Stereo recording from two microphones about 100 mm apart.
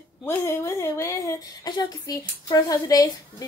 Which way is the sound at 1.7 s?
45° left (ahead or behind).